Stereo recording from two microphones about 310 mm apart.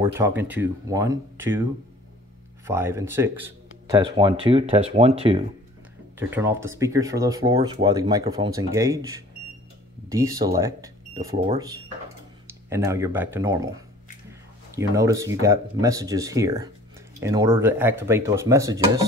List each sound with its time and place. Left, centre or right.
0.0 s speech: centre
2.6 s speech: centre
6.1 s speech: centre